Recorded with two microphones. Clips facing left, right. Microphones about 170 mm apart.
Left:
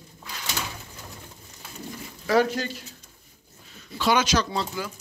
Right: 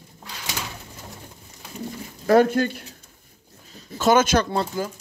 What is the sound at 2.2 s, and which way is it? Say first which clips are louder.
Speech: right 5 dB; 50° right (ahead or behind).